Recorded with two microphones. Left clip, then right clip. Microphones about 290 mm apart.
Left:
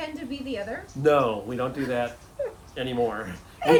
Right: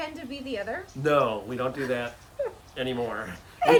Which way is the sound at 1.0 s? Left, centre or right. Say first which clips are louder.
Left 2 dB; centre.